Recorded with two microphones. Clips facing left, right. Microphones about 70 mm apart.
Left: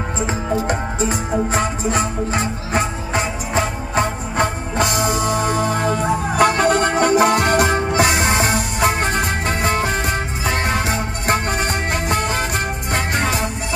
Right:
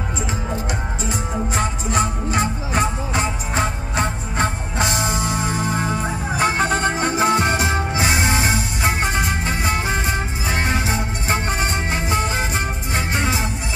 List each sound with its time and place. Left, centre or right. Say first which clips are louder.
0.3 s music: left 7 dB; left